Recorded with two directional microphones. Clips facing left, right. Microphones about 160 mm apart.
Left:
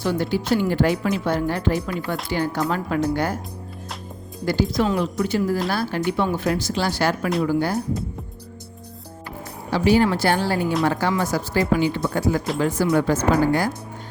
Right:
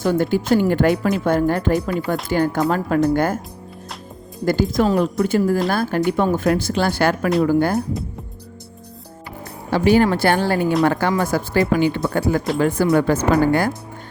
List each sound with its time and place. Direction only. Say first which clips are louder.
0.0 s speech: right 4 dB; 50° right (ahead or behind)
4.4 s speech: right 3 dB; 50° right (ahead or behind)
9.6 s speech: right 3 dB; 55° right (ahead or behind)